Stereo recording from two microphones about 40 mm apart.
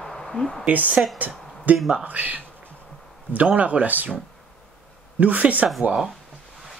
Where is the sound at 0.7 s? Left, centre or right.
Right.